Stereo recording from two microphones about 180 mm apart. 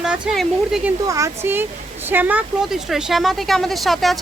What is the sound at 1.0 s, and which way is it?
A woman's voice, 20° right (ahead or behind).